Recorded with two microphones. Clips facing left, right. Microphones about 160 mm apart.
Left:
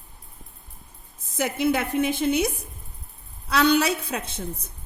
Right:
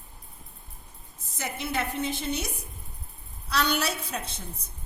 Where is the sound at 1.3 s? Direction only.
90° left.